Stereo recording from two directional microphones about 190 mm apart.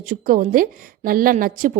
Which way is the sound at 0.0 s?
45° right (ahead or behind).